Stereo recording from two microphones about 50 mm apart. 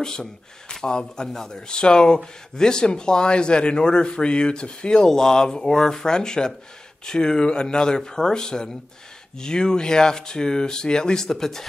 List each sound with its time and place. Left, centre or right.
0.0 s a man's voice: centre